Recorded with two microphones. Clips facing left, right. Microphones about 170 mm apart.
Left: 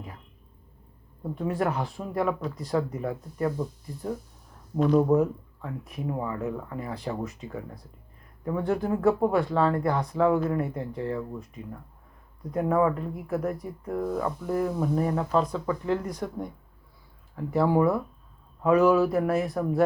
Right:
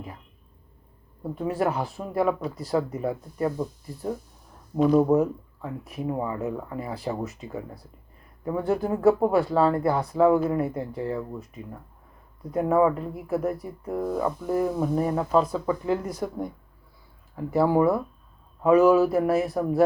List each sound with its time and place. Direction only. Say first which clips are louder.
1.2 s speech: right 2 dB; 5° right (ahead or behind)
6.1 s speech: right 2 dB; 15° right (ahead or behind)
8.4 s speech: right 1 dB; 5° right (ahead or behind)
12.5 s speech: right 3 dB; 5° right (ahead or behind)